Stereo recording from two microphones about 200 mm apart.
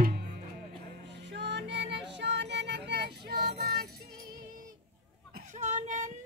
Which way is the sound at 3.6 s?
50° right (ahead or behind).